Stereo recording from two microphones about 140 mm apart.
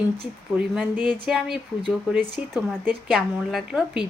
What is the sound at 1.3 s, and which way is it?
Speech, 5° right (ahead or behind).